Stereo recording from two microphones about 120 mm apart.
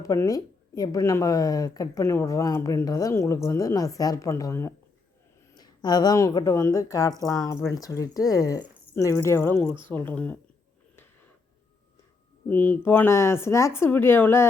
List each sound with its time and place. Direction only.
0.0 s a woman's voice: 30° left (ahead or behind)
12.5 s a woman's voice: 15° left (ahead or behind)